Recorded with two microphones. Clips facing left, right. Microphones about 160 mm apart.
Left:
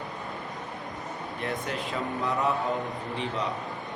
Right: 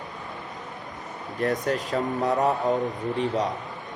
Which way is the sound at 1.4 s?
45° right (ahead or behind).